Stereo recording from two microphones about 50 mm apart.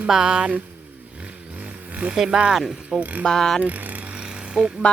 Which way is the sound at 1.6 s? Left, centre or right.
Right.